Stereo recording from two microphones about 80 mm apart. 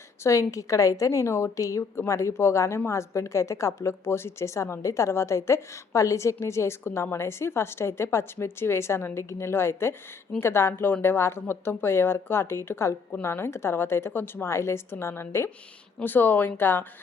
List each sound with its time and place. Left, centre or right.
0.2 s a woman's voice: left